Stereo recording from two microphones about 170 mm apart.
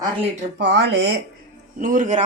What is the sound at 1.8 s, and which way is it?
Speech, 50° right (ahead or behind).